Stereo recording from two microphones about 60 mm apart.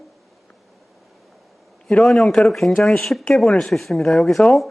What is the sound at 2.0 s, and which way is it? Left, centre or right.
Speech, centre.